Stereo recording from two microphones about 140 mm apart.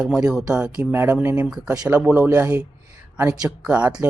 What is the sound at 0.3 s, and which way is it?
Speech, 5° right (ahead or behind).